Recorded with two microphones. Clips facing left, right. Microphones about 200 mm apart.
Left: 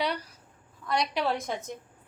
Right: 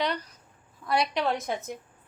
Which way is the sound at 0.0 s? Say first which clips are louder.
Right 1 dB; 10° left (ahead or behind).